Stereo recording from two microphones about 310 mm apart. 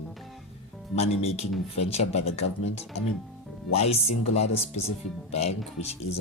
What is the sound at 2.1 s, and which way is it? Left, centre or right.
Speech, left.